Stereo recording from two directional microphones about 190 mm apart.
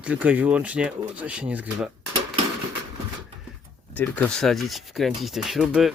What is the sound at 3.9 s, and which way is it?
Speech, 10° left (ahead or behind).